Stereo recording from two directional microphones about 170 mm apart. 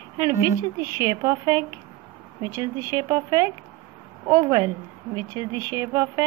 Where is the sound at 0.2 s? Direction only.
20° right (ahead or behind).